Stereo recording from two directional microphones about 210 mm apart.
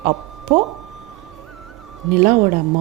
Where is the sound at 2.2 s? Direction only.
35° right (ahead or behind).